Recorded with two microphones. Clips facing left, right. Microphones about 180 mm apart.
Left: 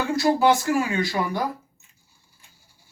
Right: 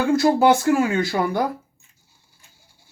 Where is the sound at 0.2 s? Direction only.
50° right (ahead or behind).